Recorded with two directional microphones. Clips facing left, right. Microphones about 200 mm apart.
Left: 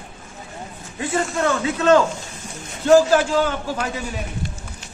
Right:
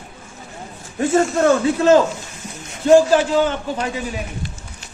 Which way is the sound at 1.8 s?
25° right (ahead or behind).